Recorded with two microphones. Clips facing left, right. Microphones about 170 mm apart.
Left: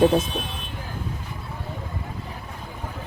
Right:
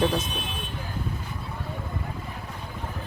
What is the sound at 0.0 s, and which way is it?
Speech, 25° left (ahead or behind).